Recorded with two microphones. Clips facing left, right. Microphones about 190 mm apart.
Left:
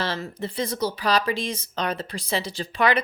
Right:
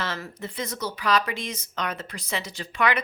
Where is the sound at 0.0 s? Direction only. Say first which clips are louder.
Left 4 dB; 30° left (ahead or behind).